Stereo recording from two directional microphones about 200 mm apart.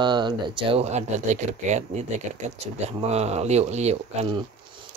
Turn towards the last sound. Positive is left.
turn(degrees=-25)  # may be behind; listen again after turning